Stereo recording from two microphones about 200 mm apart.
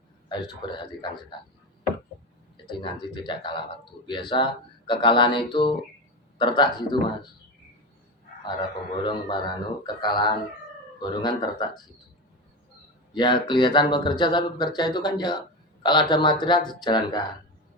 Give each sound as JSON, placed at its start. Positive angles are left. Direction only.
{"t": 0.3, "sound": "speech", "side_deg": 25}
{"t": 2.6, "sound": "speech", "side_deg": 25}
{"t": 9.0, "sound": "speech", "side_deg": 20}
{"t": 13.1, "sound": "speech", "side_deg": 20}